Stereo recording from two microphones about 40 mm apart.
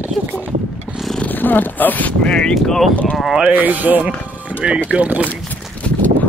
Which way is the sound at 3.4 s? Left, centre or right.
Right.